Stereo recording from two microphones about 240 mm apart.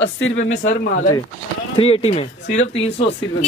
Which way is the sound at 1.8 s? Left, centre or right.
Left.